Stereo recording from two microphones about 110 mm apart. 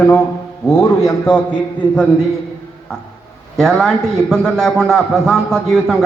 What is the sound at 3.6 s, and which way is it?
A man's voice, 5° left (ahead or behind).